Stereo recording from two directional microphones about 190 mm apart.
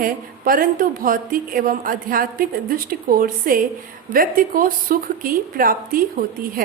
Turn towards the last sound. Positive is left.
turn(degrees=-50)  # may be behind; listen again after turning